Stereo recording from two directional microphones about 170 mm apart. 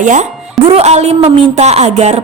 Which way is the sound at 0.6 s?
35° right (ahead or behind).